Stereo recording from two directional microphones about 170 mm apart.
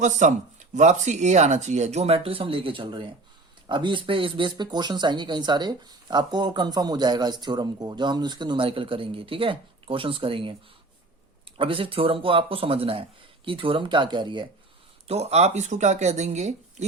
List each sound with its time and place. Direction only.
0.0 s speech: 45° right (ahead or behind); by 14.4 s 30° right (ahead or behind)
15.0 s speech: 40° right (ahead or behind)